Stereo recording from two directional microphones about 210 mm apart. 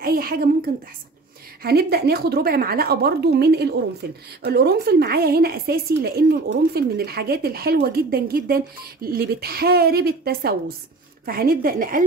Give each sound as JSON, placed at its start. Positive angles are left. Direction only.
{"t": 0.0, "sound": "a woman's voice", "side_deg": -45}